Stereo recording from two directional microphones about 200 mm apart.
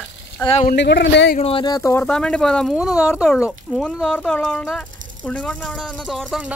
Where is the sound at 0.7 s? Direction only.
60° left (ahead or behind).